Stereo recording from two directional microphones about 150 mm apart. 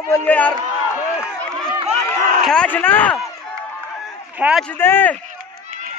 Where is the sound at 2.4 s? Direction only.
5° left (ahead or behind).